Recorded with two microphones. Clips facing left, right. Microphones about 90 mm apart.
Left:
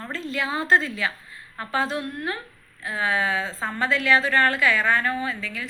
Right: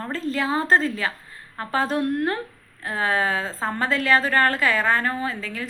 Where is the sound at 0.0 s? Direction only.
40° right (ahead or behind).